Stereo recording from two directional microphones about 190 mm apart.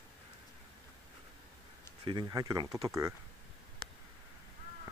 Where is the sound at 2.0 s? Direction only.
20° right (ahead or behind).